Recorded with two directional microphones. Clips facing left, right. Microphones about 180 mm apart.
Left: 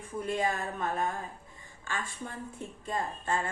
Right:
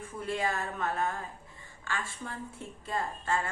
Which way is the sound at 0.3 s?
20° left (ahead or behind).